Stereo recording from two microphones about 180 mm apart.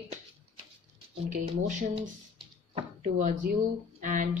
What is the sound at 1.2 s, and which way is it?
Speech, 45° right (ahead or behind).